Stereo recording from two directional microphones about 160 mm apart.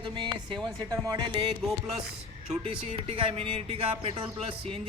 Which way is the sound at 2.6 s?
35° right (ahead or behind).